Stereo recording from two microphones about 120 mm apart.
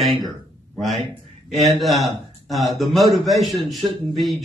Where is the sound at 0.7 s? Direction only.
Centre (ahead or behind).